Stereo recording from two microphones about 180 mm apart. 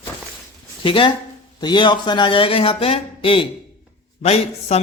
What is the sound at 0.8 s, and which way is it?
Speech, 30° left (ahead or behind).